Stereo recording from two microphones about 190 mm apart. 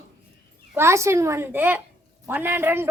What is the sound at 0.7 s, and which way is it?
A child's voice, 15° right (ahead or behind).